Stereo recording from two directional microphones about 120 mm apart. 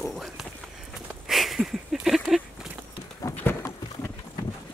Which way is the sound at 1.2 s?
Centre (ahead or behind).